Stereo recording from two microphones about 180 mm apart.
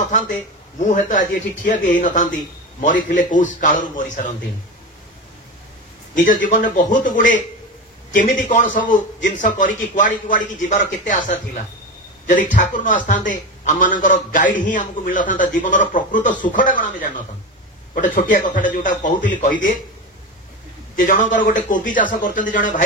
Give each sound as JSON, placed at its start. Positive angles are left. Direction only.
{"t": 0.7, "sound": "speech", "side_deg": 45}
{"t": 6.1, "sound": "speech", "side_deg": 45}
{"t": 12.3, "sound": "speech", "side_deg": 45}
{"t": 20.9, "sound": "speech", "side_deg": 50}